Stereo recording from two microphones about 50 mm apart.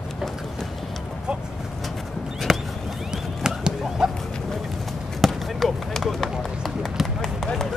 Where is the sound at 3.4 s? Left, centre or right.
Centre.